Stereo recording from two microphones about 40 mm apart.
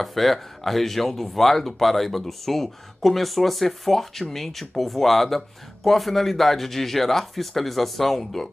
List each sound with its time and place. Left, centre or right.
0.0 s speech: centre